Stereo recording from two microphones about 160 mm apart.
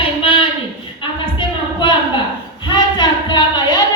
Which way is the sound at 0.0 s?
35° left (ahead or behind).